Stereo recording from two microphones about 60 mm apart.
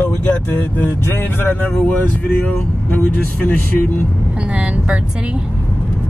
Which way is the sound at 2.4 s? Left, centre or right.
Left.